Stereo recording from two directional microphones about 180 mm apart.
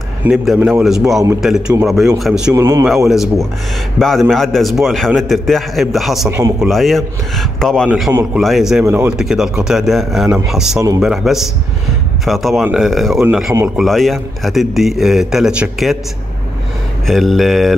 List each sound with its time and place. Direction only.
0.2 s a man's voice: 5° right (ahead or behind)
2.5 s a man's voice: 15° right (ahead or behind)
4.0 s a man's voice: centre (ahead or behind)
7.9 s a man's voice: 10° right (ahead or behind)
17.0 s a man's voice: centre (ahead or behind)